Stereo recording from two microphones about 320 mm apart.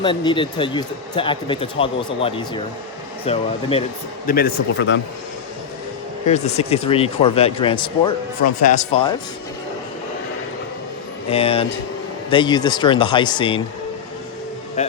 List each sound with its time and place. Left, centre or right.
0.0 s speech: centre
4.3 s speech: left
6.2 s speech: left
11.3 s speech: centre
14.8 s speech: left